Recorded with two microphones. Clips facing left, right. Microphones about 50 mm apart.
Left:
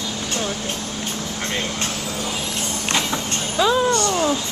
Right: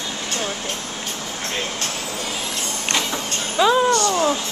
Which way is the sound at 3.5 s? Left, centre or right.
Centre.